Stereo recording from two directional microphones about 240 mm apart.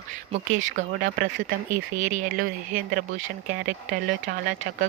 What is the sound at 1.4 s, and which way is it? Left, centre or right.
Speech, right.